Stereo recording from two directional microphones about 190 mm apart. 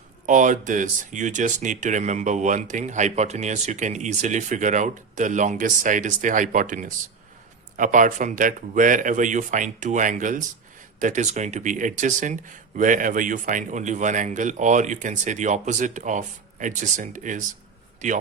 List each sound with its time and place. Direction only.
0.3 s speech: 40° right (ahead or behind)